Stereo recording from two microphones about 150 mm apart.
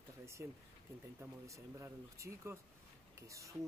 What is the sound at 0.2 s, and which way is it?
Speech, 20° right (ahead or behind).